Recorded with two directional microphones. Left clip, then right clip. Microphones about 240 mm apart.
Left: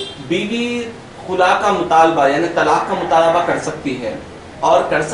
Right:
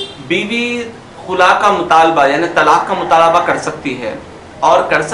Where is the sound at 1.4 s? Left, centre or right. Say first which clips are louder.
Right 4 dB; right.